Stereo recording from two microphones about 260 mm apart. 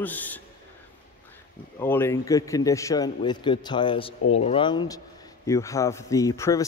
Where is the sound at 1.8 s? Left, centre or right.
Centre.